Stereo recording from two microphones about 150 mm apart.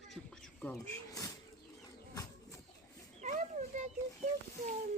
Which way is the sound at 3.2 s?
60° right (ahead or behind).